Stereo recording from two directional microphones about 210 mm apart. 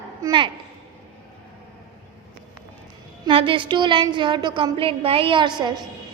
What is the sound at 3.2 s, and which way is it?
A woman's voice, 25° right (ahead or behind).